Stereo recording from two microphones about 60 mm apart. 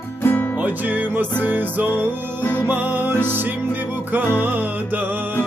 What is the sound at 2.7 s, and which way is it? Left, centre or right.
Music, right.